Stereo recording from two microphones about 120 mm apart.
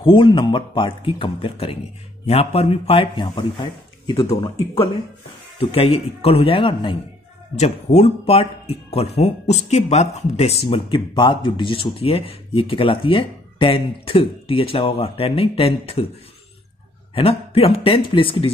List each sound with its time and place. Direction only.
0.0 s a man's voice: 45° left (ahead or behind)
7.5 s speech: 65° left (ahead or behind)
17.1 s speech: 50° left (ahead or behind)